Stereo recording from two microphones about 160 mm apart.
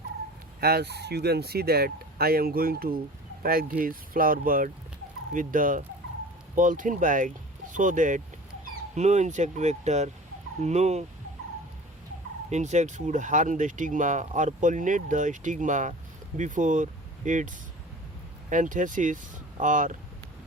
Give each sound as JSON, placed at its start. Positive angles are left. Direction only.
{"t": 0.6, "sound": "speech", "side_deg": -85}
{"t": 12.5, "sound": "speech", "side_deg": -45}